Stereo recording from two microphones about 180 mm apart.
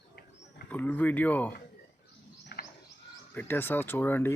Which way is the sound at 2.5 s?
65° left (ahead or behind).